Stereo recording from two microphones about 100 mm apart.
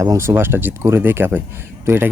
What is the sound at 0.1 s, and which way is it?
Speech, 25° right (ahead or behind).